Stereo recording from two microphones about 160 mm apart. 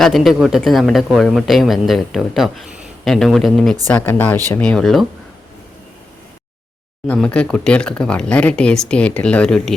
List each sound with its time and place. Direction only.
0.0 s speech: centre (ahead or behind)
7.1 s speech: 5° left (ahead or behind)